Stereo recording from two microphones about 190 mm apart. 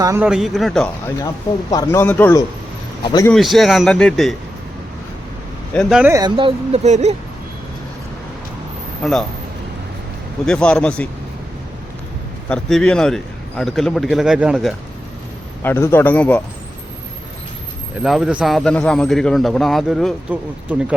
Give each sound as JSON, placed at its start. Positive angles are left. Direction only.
{"t": 0.0, "sound": "speech", "side_deg": -15}
{"t": 0.3, "sound": "a man's voice", "side_deg": 0}
{"t": 1.7, "sound": "speech", "side_deg": 15}
{"t": 3.0, "sound": "a man's voice", "side_deg": 25}
{"t": 3.3, "sound": "a man's voice", "side_deg": 0}
{"t": 5.7, "sound": "a man's voice", "side_deg": 0}
{"t": 6.1, "sound": "speech", "side_deg": -20}
{"t": 9.0, "sound": "a man's voice", "side_deg": 0}
{"t": 10.4, "sound": "a man's voice", "side_deg": 5}
{"t": 12.5, "sound": "a man's voice", "side_deg": 5}
{"t": 15.6, "sound": "speech", "side_deg": 10}
{"t": 18.0, "sound": "a man's voice", "side_deg": 0}